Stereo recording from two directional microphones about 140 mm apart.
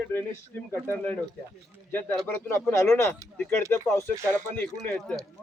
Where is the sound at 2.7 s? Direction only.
20° left (ahead or behind).